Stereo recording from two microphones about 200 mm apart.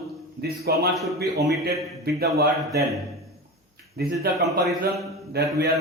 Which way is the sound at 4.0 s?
50° right (ahead or behind).